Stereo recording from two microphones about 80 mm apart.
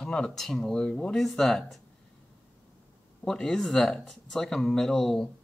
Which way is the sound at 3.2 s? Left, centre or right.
Centre.